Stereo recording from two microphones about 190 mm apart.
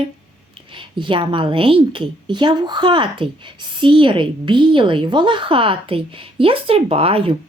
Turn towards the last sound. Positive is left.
turn(degrees=-30)  # may be behind; listen again after turning